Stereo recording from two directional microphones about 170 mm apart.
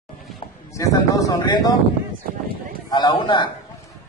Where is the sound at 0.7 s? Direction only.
20° left (ahead or behind).